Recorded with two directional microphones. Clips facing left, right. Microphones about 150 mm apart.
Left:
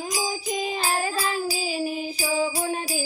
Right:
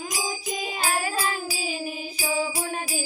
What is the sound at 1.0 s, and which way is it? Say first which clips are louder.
Child singing: left 2 dB; 35° left (ahead or behind).